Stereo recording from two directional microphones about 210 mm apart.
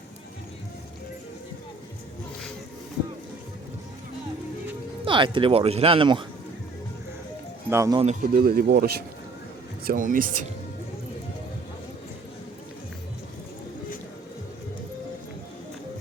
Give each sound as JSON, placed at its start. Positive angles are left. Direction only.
{"t": 5.0, "sound": "speech", "side_deg": -25}
{"t": 7.7, "sound": "speech", "side_deg": -15}
{"t": 8.0, "sound": "speech", "side_deg": -40}